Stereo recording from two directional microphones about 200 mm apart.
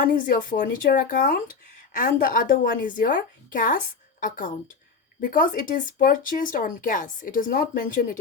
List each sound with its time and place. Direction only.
0.5 s speech: 40° left (ahead or behind)